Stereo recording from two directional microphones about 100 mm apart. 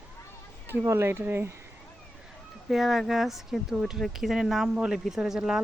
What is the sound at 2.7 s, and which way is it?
Speech, centre (ahead or behind).